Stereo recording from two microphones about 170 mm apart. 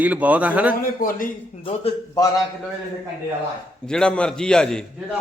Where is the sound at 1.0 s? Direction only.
55° left (ahead or behind).